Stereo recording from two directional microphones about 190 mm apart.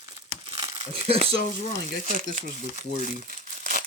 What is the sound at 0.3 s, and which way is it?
Crumpling, 30° right (ahead or behind).